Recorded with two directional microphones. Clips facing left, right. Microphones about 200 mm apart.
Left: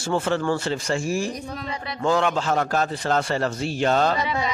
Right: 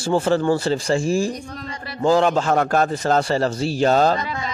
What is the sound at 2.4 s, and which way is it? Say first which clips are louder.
A man's voice: right 4 dB; 55° right (ahead or behind).